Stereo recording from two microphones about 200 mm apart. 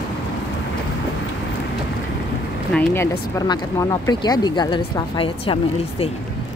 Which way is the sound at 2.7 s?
10° left (ahead or behind).